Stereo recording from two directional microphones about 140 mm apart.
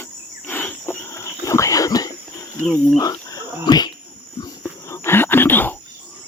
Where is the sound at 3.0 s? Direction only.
25° left (ahead or behind).